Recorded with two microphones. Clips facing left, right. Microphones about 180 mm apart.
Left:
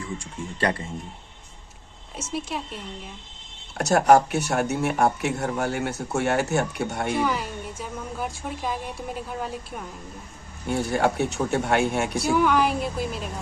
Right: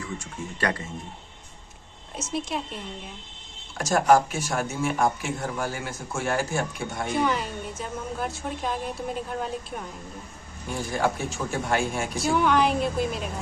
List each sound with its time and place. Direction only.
0.0 s speech: 30° left (ahead or behind)
2.1 s a woman's voice: 10° left (ahead or behind)
3.8 s speech: 65° left (ahead or behind)
7.1 s a woman's voice: 10° left (ahead or behind)
10.7 s speech: 65° left (ahead or behind)
12.3 s a woman's voice: 5° left (ahead or behind)